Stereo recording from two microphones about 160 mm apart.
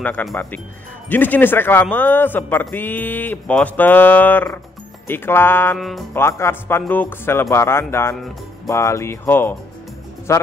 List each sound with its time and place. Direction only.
0.0 s a man's voice: 5° left (ahead or behind)
5.8 s music: centre (ahead or behind)
6.1 s a man's voice: 15° left (ahead or behind)